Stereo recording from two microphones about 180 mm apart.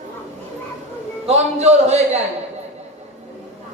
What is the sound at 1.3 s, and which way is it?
Speech, 35° right (ahead or behind).